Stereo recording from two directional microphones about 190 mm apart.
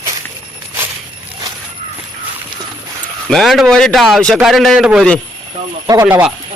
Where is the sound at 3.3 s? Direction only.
Centre (ahead or behind).